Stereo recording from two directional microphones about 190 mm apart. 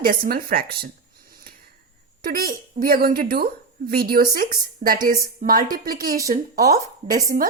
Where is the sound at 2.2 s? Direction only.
50° right (ahead or behind).